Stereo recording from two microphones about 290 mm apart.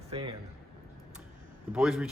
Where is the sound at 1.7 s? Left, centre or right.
Centre.